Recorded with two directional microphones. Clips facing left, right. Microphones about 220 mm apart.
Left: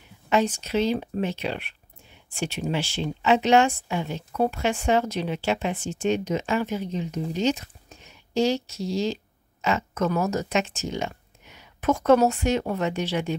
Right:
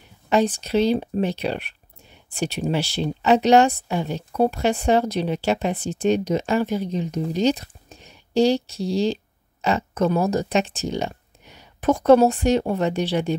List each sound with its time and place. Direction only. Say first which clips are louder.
0.3 s speech: right 3 dB; 35° right (ahead or behind)